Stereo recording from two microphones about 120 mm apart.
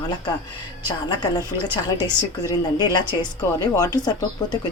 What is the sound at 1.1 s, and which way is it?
Speech, 35° left (ahead or behind).